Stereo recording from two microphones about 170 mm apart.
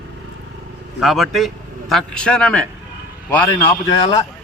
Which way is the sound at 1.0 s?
Centre (ahead or behind).